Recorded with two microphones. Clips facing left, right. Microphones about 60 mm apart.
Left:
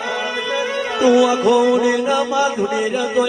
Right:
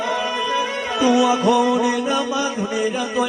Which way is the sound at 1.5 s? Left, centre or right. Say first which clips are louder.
Left 3 dB; left.